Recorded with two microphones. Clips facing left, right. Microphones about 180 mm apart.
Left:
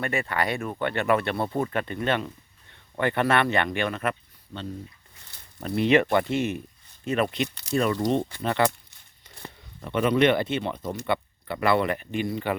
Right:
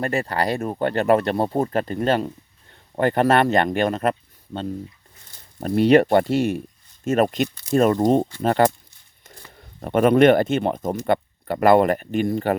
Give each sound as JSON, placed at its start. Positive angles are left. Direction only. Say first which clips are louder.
{"t": 0.0, "sound": "speech", "louder": "right 4 dB", "side_deg": -35}
{"t": 5.5, "sound": "speech", "louder": "right 6 dB", "side_deg": -40}